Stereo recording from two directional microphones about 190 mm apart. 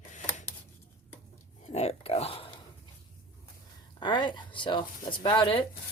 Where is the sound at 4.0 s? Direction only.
25° left (ahead or behind).